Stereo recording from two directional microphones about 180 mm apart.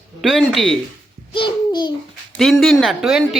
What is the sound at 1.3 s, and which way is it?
Babbling, 25° left (ahead or behind).